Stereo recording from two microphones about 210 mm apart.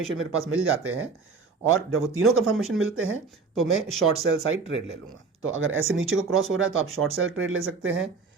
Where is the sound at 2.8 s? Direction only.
75° right (ahead or behind).